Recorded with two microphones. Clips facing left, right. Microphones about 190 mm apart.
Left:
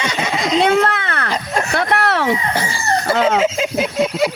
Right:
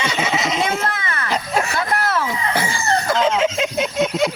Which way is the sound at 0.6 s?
65° left (ahead or behind).